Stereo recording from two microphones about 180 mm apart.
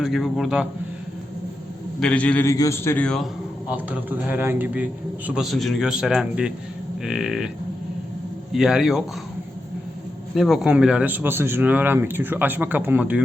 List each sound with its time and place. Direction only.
0.0 s a man's voice: centre (ahead or behind)
2.0 s a man's voice: 5° left (ahead or behind)
3.7 s a man's voice: 10° right (ahead or behind)
8.5 s a man's voice: 5° right (ahead or behind)
10.3 s a man's voice: centre (ahead or behind)